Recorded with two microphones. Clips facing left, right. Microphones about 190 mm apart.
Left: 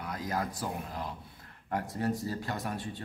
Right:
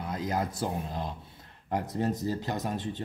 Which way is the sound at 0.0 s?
20° right (ahead or behind).